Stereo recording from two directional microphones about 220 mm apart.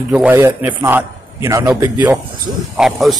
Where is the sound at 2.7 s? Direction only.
Centre (ahead or behind).